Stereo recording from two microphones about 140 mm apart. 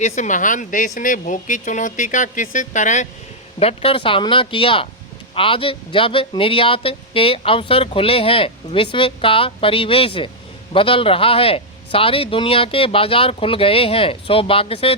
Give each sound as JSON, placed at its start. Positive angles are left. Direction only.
{"t": 0.0, "sound": "speech", "side_deg": 60}
{"t": 3.6, "sound": "speech", "side_deg": 45}